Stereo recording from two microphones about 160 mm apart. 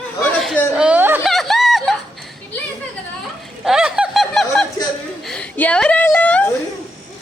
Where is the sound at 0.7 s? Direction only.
10° right (ahead or behind).